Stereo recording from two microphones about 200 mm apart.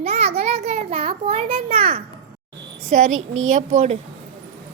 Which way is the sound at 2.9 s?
40° right (ahead or behind).